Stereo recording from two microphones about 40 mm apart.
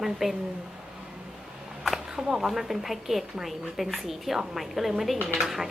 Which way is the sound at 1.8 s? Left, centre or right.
Centre.